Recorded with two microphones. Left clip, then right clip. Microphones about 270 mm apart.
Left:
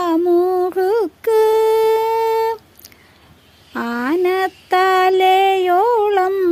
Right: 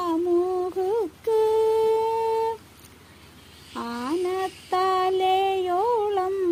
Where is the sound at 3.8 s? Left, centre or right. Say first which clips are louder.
Left 9 dB; left.